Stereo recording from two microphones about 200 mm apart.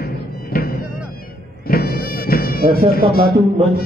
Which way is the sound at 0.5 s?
45° left (ahead or behind).